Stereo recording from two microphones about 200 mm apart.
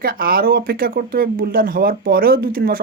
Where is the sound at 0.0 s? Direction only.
45° right (ahead or behind).